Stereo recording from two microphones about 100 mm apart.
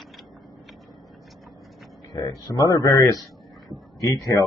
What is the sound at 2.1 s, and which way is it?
Speech, 40° left (ahead or behind).